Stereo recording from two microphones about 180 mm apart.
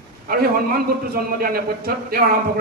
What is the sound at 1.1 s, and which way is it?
A man's voice, 55° right (ahead or behind).